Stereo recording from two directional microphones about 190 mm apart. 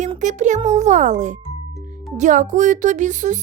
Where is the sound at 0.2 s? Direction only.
40° right (ahead or behind).